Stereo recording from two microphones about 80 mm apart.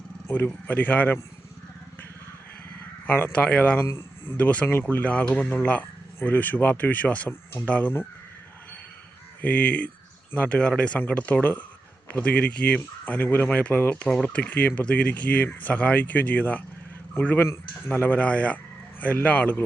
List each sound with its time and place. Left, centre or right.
0.3 s speech: left
3.1 s speech: left
3.3 s speech: centre
3.8 s speech: left
4.4 s speech: centre
9.4 s speech: centre
13.1 s speech: left